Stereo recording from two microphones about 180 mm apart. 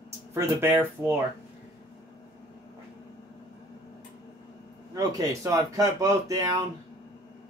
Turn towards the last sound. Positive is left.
turn(degrees=-20)  # may be behind; listen again after turning